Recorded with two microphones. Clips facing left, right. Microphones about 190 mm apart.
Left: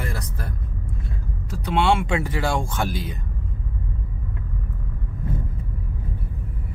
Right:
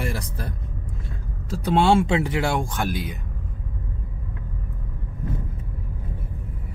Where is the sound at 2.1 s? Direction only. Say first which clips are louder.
Right 1 dB; 20° right (ahead or behind).